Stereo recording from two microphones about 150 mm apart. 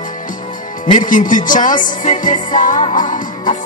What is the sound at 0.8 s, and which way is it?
Music, 55° left (ahead or behind).